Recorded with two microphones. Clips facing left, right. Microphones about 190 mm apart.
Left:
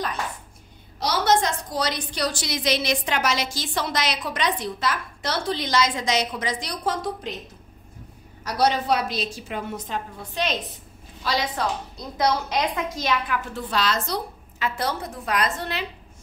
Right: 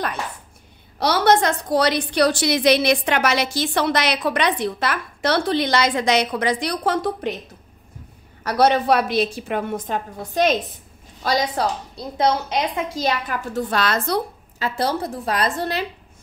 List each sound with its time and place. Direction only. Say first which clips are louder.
0.9 s a woman's voice: right 4 dB; 60° right (ahead or behind)
8.5 s a woman's voice: right 5 dB; 60° right (ahead or behind)
14.6 s a woman's voice: right 4 dB; 30° right (ahead or behind)